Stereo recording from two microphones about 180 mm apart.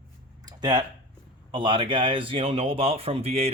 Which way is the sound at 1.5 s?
25° right (ahead or behind).